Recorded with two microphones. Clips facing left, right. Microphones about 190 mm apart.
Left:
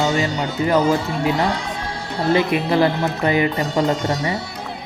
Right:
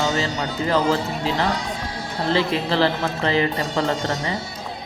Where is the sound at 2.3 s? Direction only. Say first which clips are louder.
Left 3 dB; 20° left (ahead or behind).